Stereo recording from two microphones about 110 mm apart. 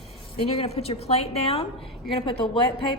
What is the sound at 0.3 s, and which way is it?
A woman's voice, 55° left (ahead or behind).